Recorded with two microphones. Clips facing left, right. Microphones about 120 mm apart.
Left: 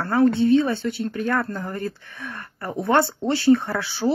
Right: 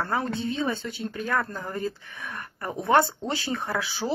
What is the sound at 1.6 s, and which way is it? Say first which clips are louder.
Speech: left 2 dB; 20° right (ahead or behind).